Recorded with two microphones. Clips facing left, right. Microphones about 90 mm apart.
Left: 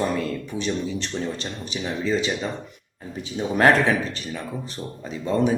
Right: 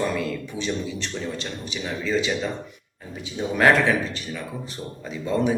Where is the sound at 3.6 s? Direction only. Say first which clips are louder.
Left 1 dB; 40° left (ahead or behind).